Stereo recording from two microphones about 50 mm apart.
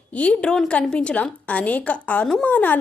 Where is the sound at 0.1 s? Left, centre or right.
Left.